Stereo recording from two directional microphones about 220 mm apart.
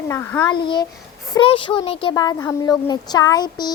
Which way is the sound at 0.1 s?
10° left (ahead or behind).